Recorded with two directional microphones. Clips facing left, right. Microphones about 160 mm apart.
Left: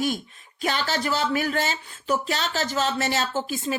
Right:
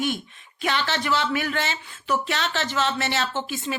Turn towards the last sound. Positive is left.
turn(degrees=40)  # may be behind; listen again after turning